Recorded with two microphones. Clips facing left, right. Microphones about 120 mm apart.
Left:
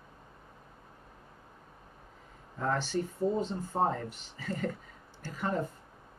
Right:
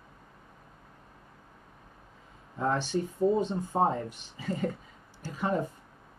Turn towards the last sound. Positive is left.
turn(degrees=-15)  # may be behind; listen again after turning